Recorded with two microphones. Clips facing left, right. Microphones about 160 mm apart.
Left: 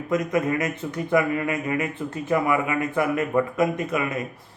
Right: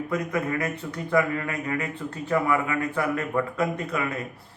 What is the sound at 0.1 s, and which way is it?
A man's voice, 20° left (ahead or behind).